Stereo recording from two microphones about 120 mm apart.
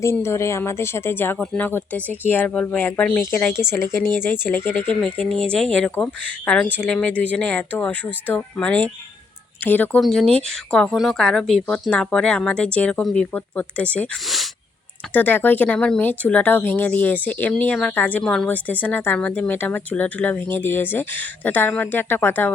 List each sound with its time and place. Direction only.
0.0 s speech: 20° left (ahead or behind)
15.1 s speech: 15° left (ahead or behind)